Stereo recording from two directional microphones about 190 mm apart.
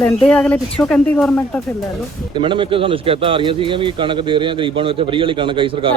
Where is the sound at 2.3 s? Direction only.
25° right (ahead or behind).